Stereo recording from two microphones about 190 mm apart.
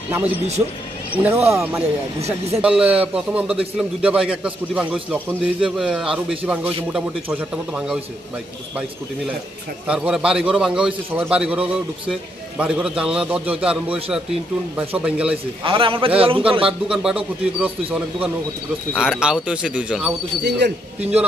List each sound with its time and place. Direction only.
0.1 s a man's voice: 10° right (ahead or behind)
9.8 s a man's voice: 5° right (ahead or behind)
15.0 s a man's voice: 5° right (ahead or behind)
15.6 s a man's voice: 25° right (ahead or behind)
16.6 s a man's voice: 5° right (ahead or behind)
20.4 s a man's voice: 60° right (ahead or behind)